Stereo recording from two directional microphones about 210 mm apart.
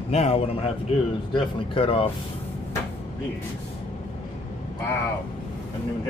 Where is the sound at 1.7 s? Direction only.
25° left (ahead or behind).